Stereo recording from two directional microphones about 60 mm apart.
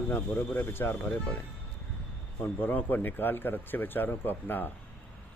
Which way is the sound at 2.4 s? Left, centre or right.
Left.